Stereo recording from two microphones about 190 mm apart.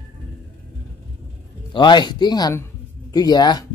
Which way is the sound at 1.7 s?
25° left (ahead or behind).